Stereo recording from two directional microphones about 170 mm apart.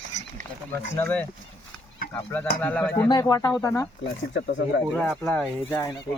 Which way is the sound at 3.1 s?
20° left (ahead or behind).